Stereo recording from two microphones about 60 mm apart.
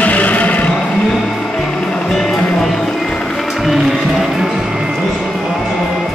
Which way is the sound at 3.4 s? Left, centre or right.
Centre.